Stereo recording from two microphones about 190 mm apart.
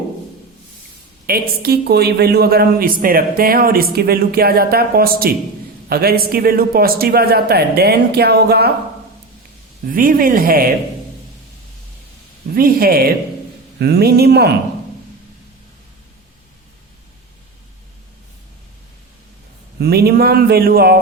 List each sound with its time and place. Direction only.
1.3 s a woman's voice: 55° right (ahead or behind)
9.8 s a woman's voice: 50° right (ahead or behind)
12.5 s a woman's voice: 50° right (ahead or behind)
19.8 s a woman's voice: 55° right (ahead or behind)